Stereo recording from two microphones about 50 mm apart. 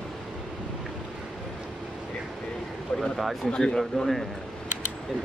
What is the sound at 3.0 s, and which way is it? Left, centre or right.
Speech, centre.